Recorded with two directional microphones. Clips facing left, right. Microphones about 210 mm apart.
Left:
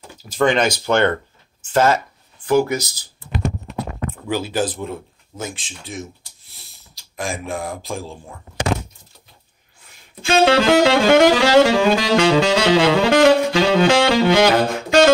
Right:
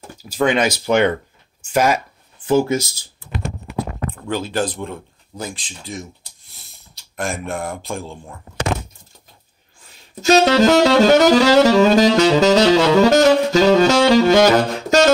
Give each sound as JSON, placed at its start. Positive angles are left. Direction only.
{"t": 0.2, "sound": "speech", "side_deg": -5}
{"t": 2.4, "sound": "speech", "side_deg": -25}
{"t": 4.1, "sound": "speech", "side_deg": 5}
{"t": 7.2, "sound": "speech", "side_deg": 0}
{"t": 10.2, "sound": "saxophone", "side_deg": -40}